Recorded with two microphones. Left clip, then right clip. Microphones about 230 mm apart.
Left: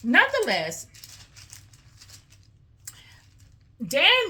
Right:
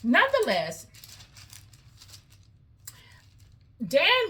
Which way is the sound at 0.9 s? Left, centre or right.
Right.